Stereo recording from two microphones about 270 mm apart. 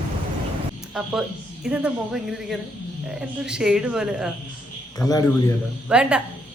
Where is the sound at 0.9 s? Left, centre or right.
Centre.